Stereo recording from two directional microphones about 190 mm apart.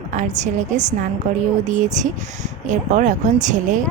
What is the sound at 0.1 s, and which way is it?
Speech, 40° right (ahead or behind).